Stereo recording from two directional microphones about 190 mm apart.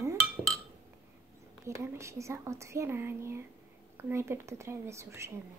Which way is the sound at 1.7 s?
15° right (ahead or behind).